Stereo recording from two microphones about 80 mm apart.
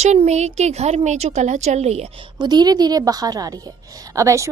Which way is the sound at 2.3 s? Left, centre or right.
Right.